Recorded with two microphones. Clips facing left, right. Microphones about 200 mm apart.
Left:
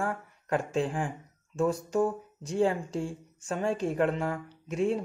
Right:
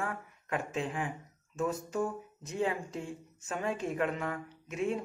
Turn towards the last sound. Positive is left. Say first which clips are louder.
# left 5 dB
turn(degrees=35)  # may be behind; listen again after turning